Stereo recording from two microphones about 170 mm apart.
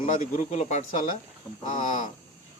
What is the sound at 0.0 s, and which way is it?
A man's voice, 45° left (ahead or behind).